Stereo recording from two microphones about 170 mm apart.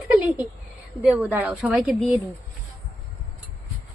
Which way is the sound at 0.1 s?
10° right (ahead or behind).